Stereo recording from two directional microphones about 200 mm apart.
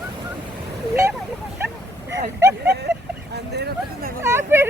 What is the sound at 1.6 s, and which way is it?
Bow-wow, 10° right (ahead or behind).